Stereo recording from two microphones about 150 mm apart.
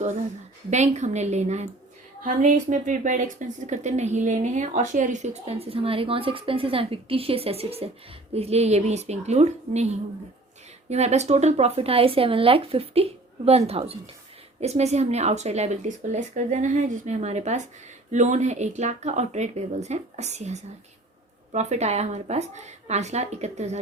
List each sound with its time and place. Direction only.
0.7 s a woman's voice: 50° right (ahead or behind)